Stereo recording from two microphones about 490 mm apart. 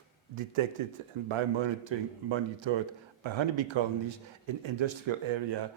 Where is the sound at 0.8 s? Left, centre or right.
Right.